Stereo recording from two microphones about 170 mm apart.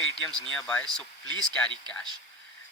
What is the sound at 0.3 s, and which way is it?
Speech, 5° left (ahead or behind).